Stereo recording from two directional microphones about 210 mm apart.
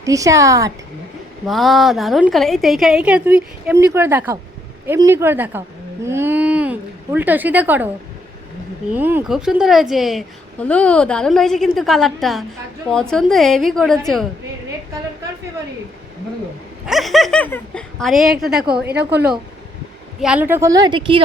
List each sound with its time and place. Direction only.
0.0 s speech: 15° right (ahead or behind)
1.5 s a woman's voice: centre (ahead or behind)
8.9 s a woman's voice: 10° right (ahead or behind)
16.8 s a woman's voice: centre (ahead or behind)
20.1 s speech: 5° right (ahead or behind); by 21.2 s 20° right (ahead or behind)